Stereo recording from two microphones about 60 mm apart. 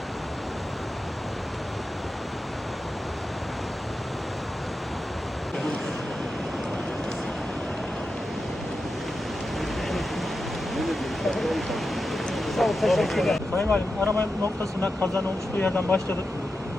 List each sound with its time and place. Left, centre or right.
10.8 s a sound: centre
12.5 s vehicle: centre
13.6 s speech: left